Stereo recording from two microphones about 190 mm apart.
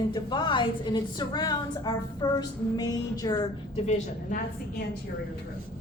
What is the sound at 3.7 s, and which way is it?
Speech, 40° left (ahead or behind).